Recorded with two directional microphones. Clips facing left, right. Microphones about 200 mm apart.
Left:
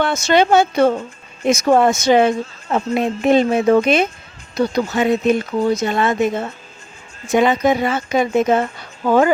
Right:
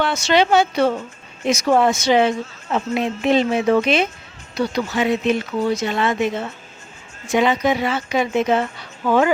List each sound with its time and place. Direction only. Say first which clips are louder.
0.0 s a woman's voice: left 2 dB; 45° left (ahead or behind)
5.5 s speech: left 3 dB; 35° left (ahead or behind)
5.8 s a woman's voice: left 3 dB; 45° left (ahead or behind)